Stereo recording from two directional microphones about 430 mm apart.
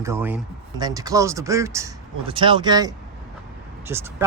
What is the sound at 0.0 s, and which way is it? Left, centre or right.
Speech, centre.